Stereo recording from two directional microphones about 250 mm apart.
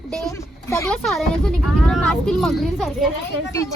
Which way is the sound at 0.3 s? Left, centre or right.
Centre.